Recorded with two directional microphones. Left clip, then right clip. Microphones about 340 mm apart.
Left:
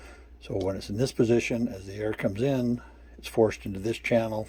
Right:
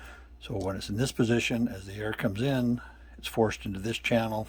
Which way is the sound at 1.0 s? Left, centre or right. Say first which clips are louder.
Left 3 dB; centre.